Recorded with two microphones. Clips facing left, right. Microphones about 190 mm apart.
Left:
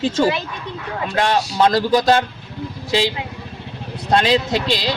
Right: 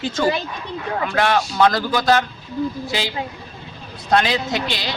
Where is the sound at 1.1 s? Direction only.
25° left (ahead or behind).